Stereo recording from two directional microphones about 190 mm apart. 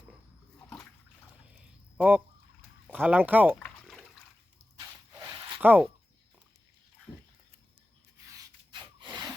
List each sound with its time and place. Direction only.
1.5 s a sound: 5° right (ahead or behind)
2.8 s speech: 10° right (ahead or behind)
3.6 s a sound: centre (ahead or behind)
4.8 s dog: 20° right (ahead or behind)
5.5 s speech: 10° right (ahead or behind)
8.3 s rub: 25° right (ahead or behind)